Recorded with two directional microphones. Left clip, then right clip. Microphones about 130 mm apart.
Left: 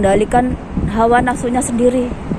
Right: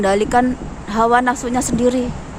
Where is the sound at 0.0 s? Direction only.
40° right (ahead or behind).